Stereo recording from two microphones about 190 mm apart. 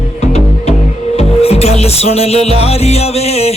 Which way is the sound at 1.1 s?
30° left (ahead or behind).